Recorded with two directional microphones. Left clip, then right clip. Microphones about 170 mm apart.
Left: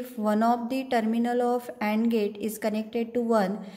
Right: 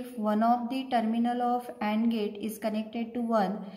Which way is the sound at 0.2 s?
40° left (ahead or behind).